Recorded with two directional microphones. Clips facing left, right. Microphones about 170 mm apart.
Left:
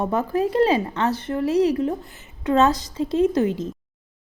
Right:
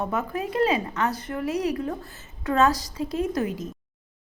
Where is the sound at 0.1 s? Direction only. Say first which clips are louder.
Left 6 dB; 30° left (ahead or behind).